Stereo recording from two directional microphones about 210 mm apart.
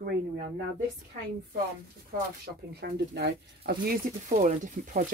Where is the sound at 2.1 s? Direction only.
40° right (ahead or behind).